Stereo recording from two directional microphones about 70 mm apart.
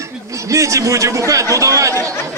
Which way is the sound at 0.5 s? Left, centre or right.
Right.